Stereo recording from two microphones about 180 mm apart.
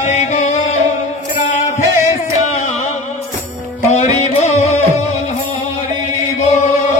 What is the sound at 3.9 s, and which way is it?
Music, 40° left (ahead or behind).